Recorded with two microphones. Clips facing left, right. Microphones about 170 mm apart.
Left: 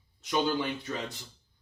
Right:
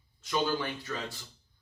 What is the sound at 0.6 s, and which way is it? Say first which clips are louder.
Speech: left 4 dB; 20° left (ahead or behind).